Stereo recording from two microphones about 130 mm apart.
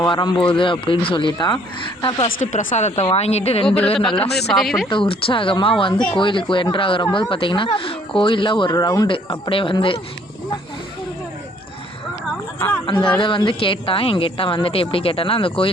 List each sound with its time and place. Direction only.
0.0 s speech: 35° left (ahead or behind)
2.5 s speech: 80° left; by 3.7 s 50° left (ahead or behind)
4.0 s speech: 40° left (ahead or behind)
4.5 s speech: centre (ahead or behind)
4.9 s speech: 40° left (ahead or behind)
9.1 s speech: 45° left (ahead or behind)
12.5 s a sound: 15° left (ahead or behind)
12.8 s speech: 40° left (ahead or behind)